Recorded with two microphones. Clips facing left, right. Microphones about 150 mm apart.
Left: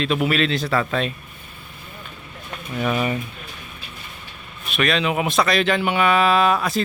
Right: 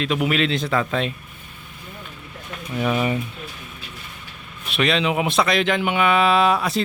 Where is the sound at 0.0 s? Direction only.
15° right (ahead or behind).